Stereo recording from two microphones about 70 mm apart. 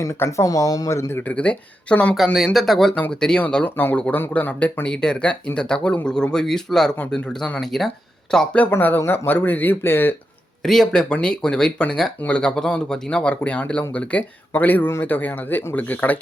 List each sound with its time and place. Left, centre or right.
0.3 s speech: left
1.2 s speech: left
2.1 s speech: centre
3.4 s speech: left; by 6.9 s centre
7.0 s speech: centre
7.6 s speech: centre
8.7 s speech: left
10.6 s speech: centre; by 16.1 s left